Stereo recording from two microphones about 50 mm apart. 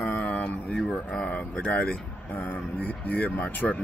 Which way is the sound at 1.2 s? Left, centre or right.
Left.